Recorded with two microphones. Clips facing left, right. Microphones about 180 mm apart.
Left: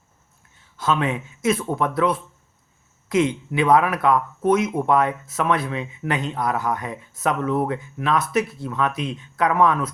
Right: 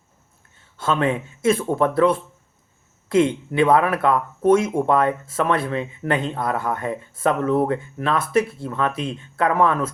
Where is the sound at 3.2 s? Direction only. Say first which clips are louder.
Right 2 dB; 55° right (ahead or behind).